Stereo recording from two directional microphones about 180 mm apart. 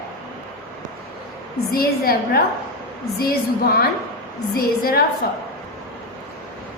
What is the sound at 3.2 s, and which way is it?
A woman's voice, 60° left (ahead or behind).